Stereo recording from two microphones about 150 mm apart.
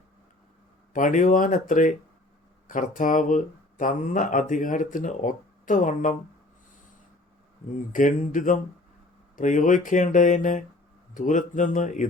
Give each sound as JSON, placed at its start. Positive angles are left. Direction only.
{"t": 0.9, "sound": "speech", "side_deg": 60}
{"t": 7.7, "sound": "speech", "side_deg": 60}